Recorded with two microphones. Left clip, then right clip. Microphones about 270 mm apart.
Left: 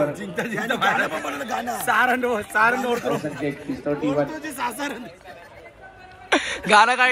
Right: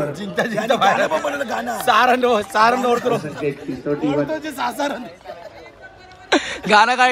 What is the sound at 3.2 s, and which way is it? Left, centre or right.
Speech, left.